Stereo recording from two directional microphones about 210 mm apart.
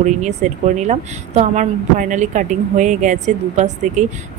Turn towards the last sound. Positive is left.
turn(degrees=-35)  # may be behind; listen again after turning